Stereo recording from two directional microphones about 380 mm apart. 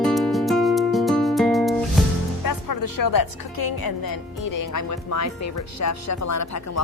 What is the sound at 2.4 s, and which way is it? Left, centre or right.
Music, left.